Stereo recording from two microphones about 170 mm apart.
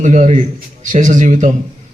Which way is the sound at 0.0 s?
45° right (ahead or behind).